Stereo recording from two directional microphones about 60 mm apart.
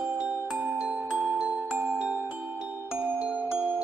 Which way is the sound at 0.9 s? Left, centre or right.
Right.